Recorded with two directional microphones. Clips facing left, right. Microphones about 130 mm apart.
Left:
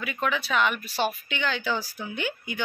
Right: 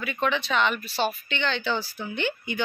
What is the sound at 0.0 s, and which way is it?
Speech, 5° left (ahead or behind).